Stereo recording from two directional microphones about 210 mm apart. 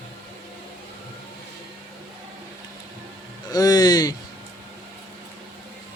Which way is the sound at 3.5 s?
15° left (ahead or behind).